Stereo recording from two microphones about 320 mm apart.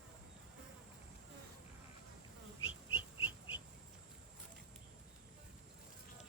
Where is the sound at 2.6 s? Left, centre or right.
Left.